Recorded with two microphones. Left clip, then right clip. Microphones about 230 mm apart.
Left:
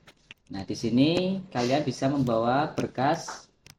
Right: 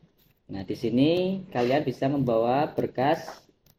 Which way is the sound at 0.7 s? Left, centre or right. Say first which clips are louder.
Right 1 dB; left.